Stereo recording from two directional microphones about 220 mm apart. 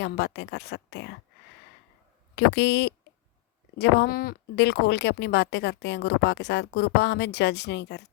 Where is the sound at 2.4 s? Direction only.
50° left (ahead or behind).